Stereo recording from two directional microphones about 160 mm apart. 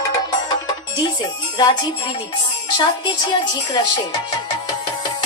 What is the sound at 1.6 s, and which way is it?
Speech, 30° left (ahead or behind).